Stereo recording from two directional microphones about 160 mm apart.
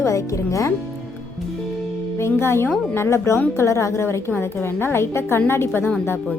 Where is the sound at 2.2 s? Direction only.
15° left (ahead or behind).